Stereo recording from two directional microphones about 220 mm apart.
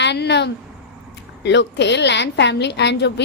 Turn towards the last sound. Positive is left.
turn(degrees=50)  # may be behind; listen again after turning